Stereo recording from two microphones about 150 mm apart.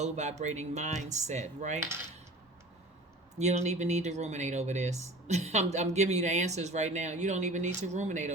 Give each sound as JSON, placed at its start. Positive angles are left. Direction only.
{"t": 0.0, "sound": "speech", "side_deg": -50}
{"t": 3.3, "sound": "speech", "side_deg": -50}